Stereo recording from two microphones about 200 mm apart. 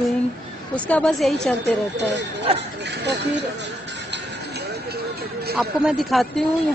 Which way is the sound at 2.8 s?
60° right (ahead or behind).